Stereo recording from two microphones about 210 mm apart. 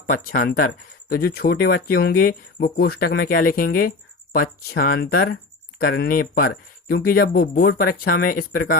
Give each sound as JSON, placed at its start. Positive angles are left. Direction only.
{"t": 0.1, "sound": "speech", "side_deg": 45}